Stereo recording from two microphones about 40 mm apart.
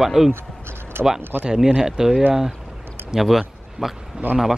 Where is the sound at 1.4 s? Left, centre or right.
Right; by 3.9 s centre.